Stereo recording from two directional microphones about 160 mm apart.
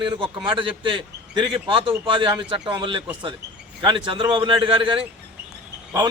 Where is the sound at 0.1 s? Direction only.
30° right (ahead or behind).